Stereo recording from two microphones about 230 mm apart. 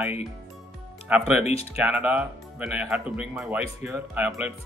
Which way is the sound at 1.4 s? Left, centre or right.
Left.